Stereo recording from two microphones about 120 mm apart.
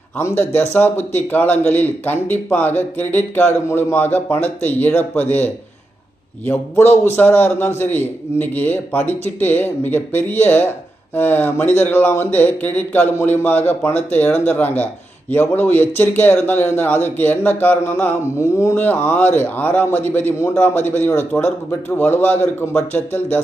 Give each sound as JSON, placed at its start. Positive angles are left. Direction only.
{"t": 0.7, "sound": "speech", "side_deg": 15}